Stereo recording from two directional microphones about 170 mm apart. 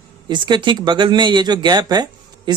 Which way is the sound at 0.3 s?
25° right (ahead or behind).